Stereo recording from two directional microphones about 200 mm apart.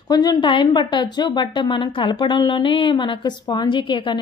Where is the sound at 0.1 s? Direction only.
20° left (ahead or behind).